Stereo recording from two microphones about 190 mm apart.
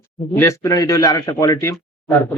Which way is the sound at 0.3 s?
15° left (ahead or behind).